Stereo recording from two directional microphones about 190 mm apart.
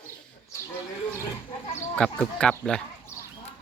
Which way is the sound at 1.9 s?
5° left (ahead or behind).